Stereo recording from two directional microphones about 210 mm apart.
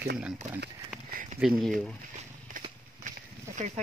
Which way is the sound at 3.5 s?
35° right (ahead or behind).